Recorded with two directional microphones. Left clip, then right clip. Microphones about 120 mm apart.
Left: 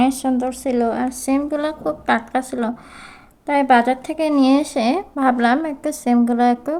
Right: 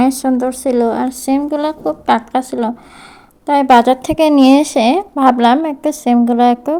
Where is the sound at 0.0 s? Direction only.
35° right (ahead or behind).